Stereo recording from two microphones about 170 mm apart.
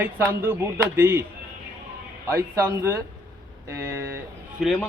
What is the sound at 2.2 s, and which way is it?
A man's voice, 15° right (ahead or behind).